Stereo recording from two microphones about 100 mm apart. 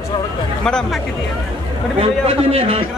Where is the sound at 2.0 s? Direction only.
75° right (ahead or behind).